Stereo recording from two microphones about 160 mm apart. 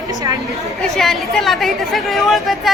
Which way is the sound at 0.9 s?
Centre (ahead or behind).